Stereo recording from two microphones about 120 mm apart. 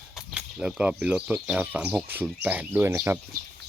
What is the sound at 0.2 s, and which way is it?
Speech, 10° right (ahead or behind).